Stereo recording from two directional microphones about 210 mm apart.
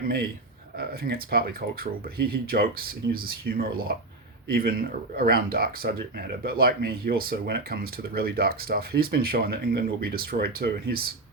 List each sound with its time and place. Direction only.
0.8 s speech: 45° right (ahead or behind)